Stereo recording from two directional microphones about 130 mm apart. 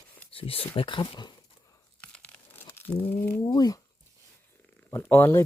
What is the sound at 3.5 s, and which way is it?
Speech, 30° left (ahead or behind).